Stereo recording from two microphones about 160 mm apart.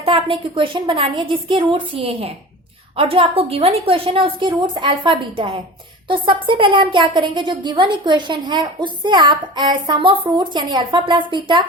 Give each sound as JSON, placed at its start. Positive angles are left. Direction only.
{"t": 0.0, "sound": "a woman's voice", "side_deg": -35}